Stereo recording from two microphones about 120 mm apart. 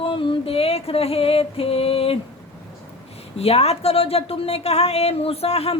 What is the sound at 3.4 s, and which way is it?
A woman's voice, 60° left (ahead or behind).